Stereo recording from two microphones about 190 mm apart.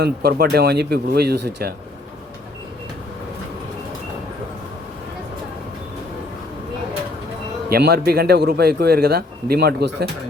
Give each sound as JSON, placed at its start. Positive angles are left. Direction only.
{"t": 0.0, "sound": "a man's voice", "side_deg": -55}
{"t": 7.7, "sound": "a man's voice", "side_deg": -55}